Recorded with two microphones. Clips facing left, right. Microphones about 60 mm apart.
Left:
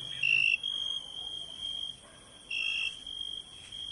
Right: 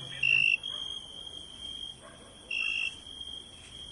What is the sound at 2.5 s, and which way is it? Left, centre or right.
Smoke detector, right.